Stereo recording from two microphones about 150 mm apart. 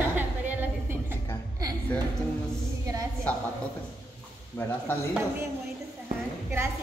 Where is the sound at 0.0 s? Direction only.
10° right (ahead or behind).